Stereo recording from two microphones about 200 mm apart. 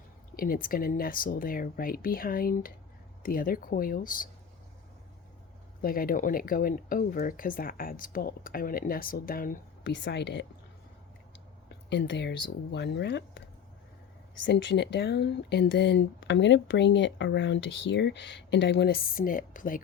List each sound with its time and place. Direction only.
0.3 s speech: 45° left (ahead or behind)
5.8 s speech: 45° left (ahead or behind)
9.9 s speech: 60° left (ahead or behind)
11.9 s speech: 60° left (ahead or behind)
14.4 s speech: 65° left (ahead or behind); by 19.8 s 45° left (ahead or behind)